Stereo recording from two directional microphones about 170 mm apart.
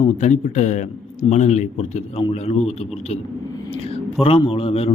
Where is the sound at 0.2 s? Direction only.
45° left (ahead or behind).